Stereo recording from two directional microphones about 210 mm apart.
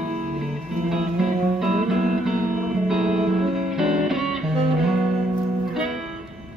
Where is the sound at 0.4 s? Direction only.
Centre (ahead or behind).